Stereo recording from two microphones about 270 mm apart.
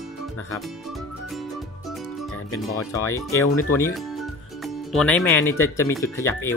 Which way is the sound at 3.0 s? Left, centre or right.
Centre.